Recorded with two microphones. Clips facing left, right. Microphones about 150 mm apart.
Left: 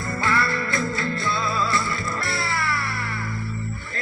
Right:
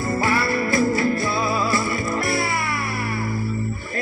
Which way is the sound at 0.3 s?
25° right (ahead or behind).